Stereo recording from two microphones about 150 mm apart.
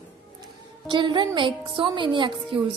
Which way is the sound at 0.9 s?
30° right (ahead or behind).